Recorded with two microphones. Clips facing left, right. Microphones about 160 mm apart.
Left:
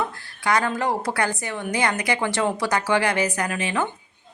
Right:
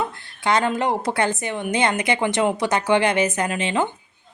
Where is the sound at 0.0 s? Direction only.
25° right (ahead or behind).